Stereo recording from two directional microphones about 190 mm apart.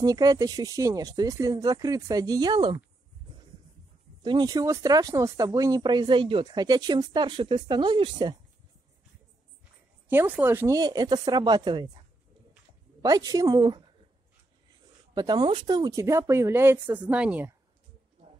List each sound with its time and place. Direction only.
0.0 s speech: 20° right (ahead or behind)
4.2 s speech: 25° right (ahead or behind)
10.0 s speech: 10° right (ahead or behind)
13.0 s speech: 20° right (ahead or behind)
15.1 s speech: 20° right (ahead or behind)